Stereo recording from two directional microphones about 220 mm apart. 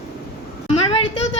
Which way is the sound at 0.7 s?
25° left (ahead or behind).